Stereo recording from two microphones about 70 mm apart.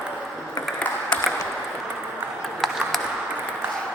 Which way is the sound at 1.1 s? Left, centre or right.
Centre.